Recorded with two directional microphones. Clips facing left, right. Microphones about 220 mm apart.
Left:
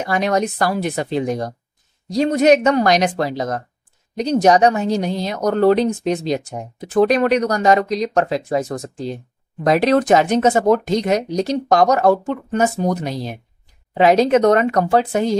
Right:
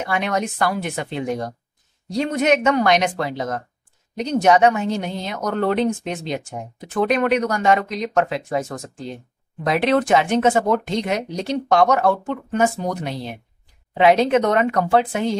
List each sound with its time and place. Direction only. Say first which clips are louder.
0.0 s a woman's voice: left 4 dB; 40° left (ahead or behind)